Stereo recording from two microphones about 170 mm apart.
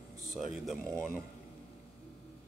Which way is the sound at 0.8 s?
15° right (ahead or behind).